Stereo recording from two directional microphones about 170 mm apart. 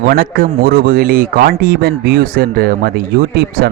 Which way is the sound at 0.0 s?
65° right (ahead or behind).